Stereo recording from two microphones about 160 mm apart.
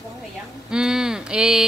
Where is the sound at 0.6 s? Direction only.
5° right (ahead or behind).